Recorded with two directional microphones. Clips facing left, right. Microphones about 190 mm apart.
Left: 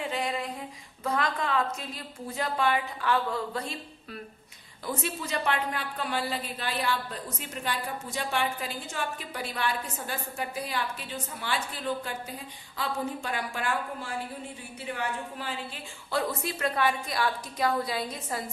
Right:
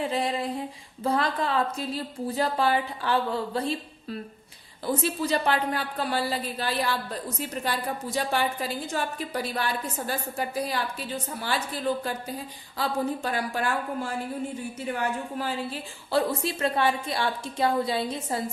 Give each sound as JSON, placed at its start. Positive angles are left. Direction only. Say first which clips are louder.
{"t": 0.0, "sound": "a sound", "louder": "right 4 dB", "side_deg": -35}
{"t": 1.0, "sound": "a woman's voice", "louder": "right 3 dB", "side_deg": -30}
{"t": 12.7, "sound": "a woman's voice", "louder": "right 4 dB", "side_deg": -35}
{"t": 15.4, "sound": "a woman's voice", "louder": "right 6 dB", "side_deg": -35}